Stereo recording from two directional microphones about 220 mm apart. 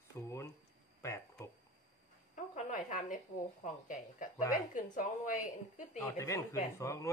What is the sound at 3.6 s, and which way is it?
Speech, 35° left (ahead or behind).